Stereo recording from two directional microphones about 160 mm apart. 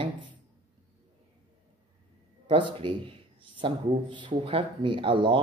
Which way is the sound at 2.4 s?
30° right (ahead or behind).